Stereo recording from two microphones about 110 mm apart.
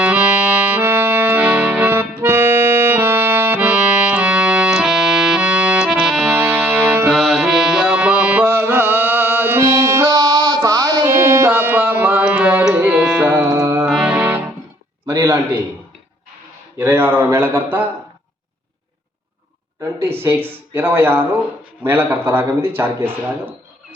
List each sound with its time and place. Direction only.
0.0 s music: 10° right (ahead or behind)
6.3 s music: 20° right (ahead or behind)
7.1 s music: centre (ahead or behind)
13.2 s music: 25° right (ahead or behind)
13.9 s music: 5° right (ahead or behind)
14.2 s music: 15° right (ahead or behind)
15.0 s a sound: 35° right (ahead or behind)
16.7 s speech: 20° right (ahead or behind)
19.8 s speech: 20° right (ahead or behind)